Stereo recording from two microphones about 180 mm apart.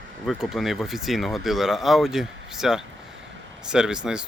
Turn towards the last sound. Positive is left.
turn(degrees=-5)  # may be behind; listen again after turning